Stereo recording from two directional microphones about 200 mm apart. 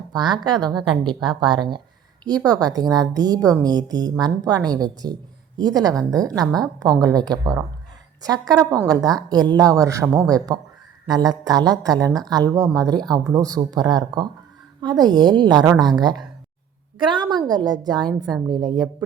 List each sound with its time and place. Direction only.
0.1 s a woman's voice: 20° right (ahead or behind)